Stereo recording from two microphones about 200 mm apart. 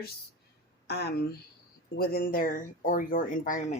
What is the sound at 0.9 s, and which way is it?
Speech, 55° left (ahead or behind).